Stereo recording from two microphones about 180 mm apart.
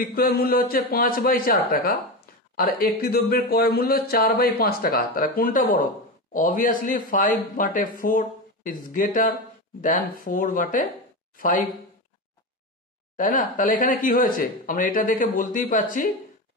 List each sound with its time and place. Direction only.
0.0 s speech: 55° left (ahead or behind)
13.1 s speech: 50° left (ahead or behind)